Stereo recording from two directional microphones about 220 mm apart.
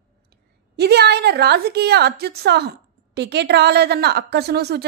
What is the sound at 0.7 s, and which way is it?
A woman's voice, 50° right (ahead or behind).